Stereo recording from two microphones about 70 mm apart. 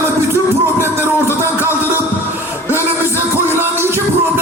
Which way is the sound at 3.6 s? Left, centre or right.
Right.